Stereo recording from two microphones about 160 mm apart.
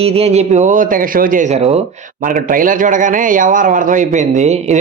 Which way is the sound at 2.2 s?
60° right (ahead or behind).